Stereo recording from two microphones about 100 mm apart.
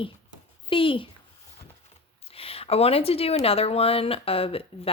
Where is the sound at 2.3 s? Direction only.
75° left (ahead or behind).